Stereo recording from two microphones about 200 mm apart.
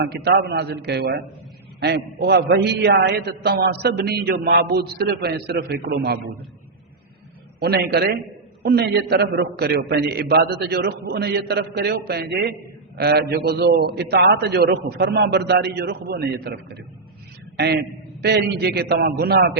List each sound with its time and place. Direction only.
0.0 s a man's voice: 55° right (ahead or behind)
7.6 s a man's voice: 55° right (ahead or behind)
18.2 s a man's voice: 55° right (ahead or behind)